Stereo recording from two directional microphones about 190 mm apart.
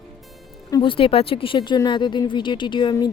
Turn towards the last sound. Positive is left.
turn(degrees=25)  # may be behind; listen again after turning